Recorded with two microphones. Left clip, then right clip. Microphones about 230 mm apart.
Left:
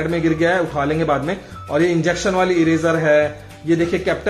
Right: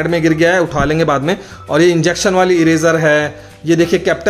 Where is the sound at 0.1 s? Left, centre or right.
Right.